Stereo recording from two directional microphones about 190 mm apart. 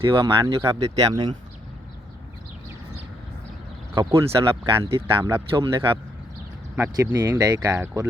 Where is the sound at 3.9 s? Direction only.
20° right (ahead or behind).